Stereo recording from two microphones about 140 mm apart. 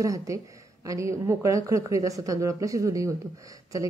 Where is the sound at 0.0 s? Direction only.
25° right (ahead or behind).